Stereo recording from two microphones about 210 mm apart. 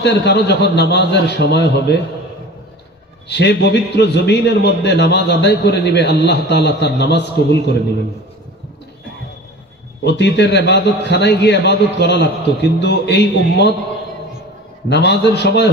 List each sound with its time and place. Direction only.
0.0 s a man's voice: 55° left (ahead or behind)
3.3 s a man's voice: 55° left (ahead or behind)
10.0 s a man's voice: 55° left (ahead or behind)
14.9 s a man's voice: 55° left (ahead or behind)